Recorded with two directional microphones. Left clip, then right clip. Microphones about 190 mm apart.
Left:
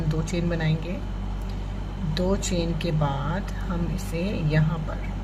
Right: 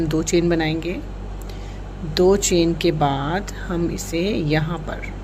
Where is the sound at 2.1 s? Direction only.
50° right (ahead or behind).